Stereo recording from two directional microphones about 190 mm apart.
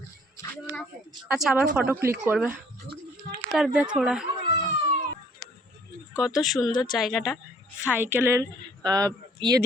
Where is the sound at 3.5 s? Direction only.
5° right (ahead or behind).